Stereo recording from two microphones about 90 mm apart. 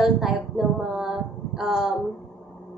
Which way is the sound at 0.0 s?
5° right (ahead or behind).